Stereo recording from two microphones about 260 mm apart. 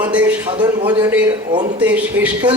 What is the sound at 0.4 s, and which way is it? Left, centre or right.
A man's voice, centre.